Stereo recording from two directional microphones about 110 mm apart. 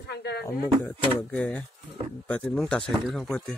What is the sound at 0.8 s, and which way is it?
Speech, 15° left (ahead or behind).